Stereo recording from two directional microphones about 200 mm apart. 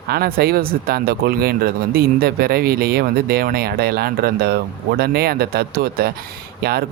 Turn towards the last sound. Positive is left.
turn(degrees=-50)  # may be behind; listen again after turning